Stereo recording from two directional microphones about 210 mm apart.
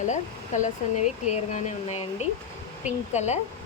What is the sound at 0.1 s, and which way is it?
Speech, 35° left (ahead or behind).